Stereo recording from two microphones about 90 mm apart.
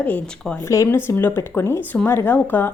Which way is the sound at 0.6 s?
35° left (ahead or behind).